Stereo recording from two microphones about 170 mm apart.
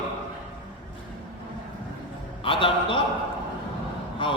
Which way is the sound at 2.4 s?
30° left (ahead or behind).